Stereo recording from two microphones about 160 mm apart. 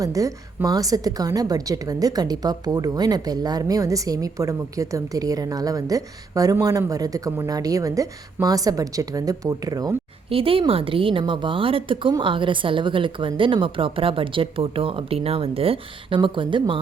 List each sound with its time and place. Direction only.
0.0 s a woman's voice: 20° right (ahead or behind)
10.2 s a woman's voice: 35° right (ahead or behind)